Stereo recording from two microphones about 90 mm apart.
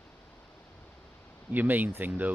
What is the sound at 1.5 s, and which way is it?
Speech, 20° right (ahead or behind).